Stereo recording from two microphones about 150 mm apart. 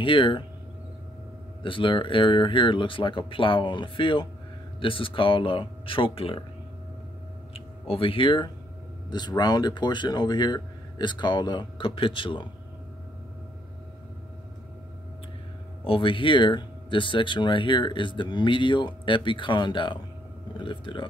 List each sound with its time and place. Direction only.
0.0 s speech: 35° left (ahead or behind)
1.6 s speech: 35° left (ahead or behind)
7.5 s speech: 40° left (ahead or behind)
15.8 s speech: 35° left (ahead or behind)